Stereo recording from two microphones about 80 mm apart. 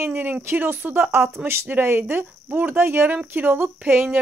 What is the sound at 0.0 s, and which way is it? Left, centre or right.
Speech, right.